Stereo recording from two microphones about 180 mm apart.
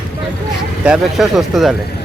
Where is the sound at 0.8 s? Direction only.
Centre (ahead or behind).